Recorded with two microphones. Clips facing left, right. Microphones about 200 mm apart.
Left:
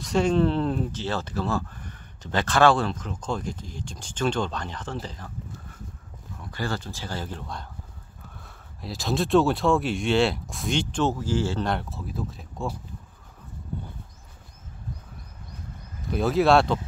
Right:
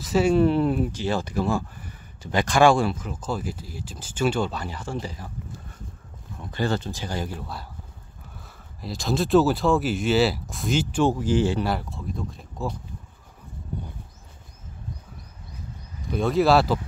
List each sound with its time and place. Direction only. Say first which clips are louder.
0.0 s speech: right 2 dB; 5° right (ahead or behind)
6.4 s speech: right 5 dB; 25° right (ahead or behind)
11.7 s speech: right 1 dB; centre (ahead or behind)
13.7 s speech: right 1 dB; 15° right (ahead or behind)
16.1 s speech: even; centre (ahead or behind)